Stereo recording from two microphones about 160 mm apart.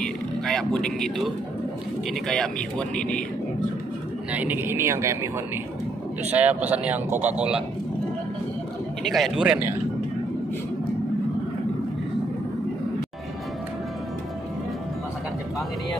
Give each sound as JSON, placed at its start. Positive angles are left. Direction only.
{"t": 0.0, "sound": "a sound", "side_deg": 5}
{"t": 2.2, "sound": "speech", "side_deg": 5}
{"t": 4.3, "sound": "speech", "side_deg": -10}
{"t": 6.3, "sound": "speech", "side_deg": -10}
{"t": 9.0, "sound": "speech", "side_deg": 0}